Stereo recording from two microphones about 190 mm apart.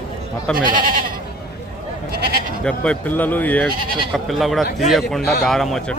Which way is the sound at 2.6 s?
5° left (ahead or behind).